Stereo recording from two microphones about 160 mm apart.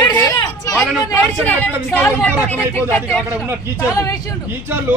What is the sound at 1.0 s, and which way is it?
Speech, 10° left (ahead or behind).